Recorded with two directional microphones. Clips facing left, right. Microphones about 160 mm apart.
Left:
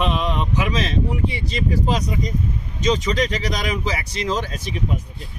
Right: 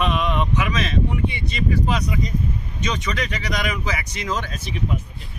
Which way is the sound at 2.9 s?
30° left (ahead or behind).